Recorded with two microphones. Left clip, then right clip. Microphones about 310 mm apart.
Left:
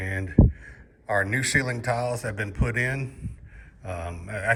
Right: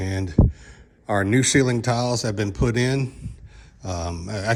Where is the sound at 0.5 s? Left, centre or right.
Centre.